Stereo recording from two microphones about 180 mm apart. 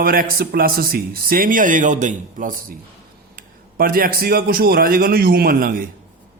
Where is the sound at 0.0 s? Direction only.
55° right (ahead or behind).